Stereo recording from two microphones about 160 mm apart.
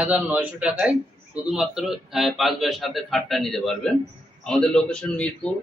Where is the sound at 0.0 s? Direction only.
10° right (ahead or behind).